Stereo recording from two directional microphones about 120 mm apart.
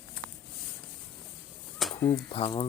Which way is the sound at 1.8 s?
Centre (ahead or behind).